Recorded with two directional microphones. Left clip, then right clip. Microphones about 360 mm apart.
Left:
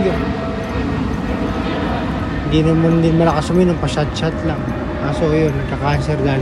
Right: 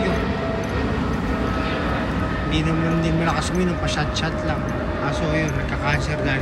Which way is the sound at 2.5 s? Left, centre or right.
Centre.